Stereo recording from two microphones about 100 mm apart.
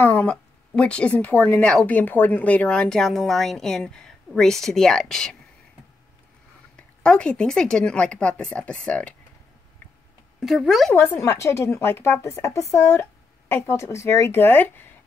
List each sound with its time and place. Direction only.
0.0 s speech: 15° left (ahead or behind)
6.8 s speech: 10° left (ahead or behind)
10.4 s speech: 5° right (ahead or behind)
11.0 s a woman's voice: 25° left (ahead or behind)